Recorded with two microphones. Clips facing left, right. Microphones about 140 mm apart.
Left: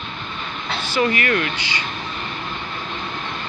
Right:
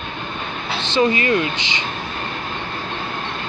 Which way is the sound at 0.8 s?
25° right (ahead or behind).